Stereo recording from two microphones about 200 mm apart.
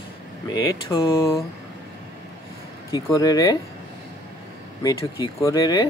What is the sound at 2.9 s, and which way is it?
Speech, 20° left (ahead or behind).